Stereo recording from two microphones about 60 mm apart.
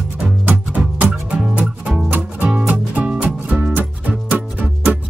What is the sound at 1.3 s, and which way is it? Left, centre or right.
Music, centre.